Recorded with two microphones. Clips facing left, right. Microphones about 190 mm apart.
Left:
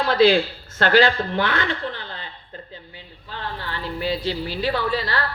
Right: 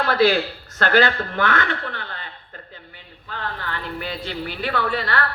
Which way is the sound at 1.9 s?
55° right (ahead or behind).